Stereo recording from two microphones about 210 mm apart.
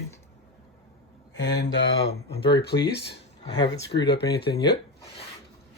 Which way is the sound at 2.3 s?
25° left (ahead or behind).